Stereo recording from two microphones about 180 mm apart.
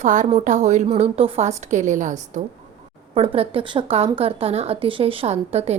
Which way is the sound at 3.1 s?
30° right (ahead or behind).